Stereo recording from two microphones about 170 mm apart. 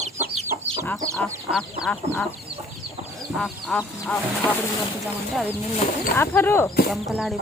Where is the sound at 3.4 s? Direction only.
5° left (ahead or behind).